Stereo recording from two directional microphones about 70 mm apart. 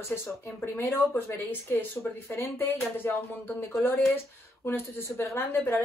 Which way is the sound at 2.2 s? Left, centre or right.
Left.